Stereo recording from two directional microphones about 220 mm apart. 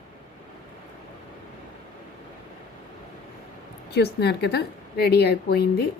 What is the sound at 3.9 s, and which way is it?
A woman's voice, 50° left (ahead or behind).